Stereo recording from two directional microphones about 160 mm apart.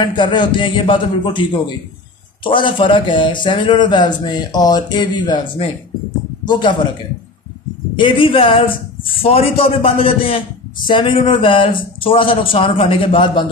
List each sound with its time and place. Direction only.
0.0 s speech: 30° left (ahead or behind)
7.9 s speech: 30° left (ahead or behind)